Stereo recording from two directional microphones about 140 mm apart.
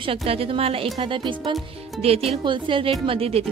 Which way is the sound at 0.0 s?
40° right (ahead or behind).